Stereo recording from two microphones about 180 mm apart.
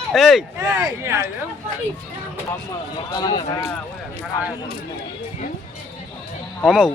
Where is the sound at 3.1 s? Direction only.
20° left (ahead or behind).